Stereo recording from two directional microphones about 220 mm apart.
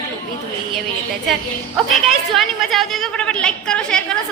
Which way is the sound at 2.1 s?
Centre (ahead or behind).